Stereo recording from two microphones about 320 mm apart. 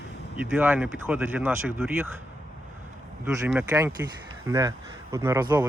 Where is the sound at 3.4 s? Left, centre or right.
Centre.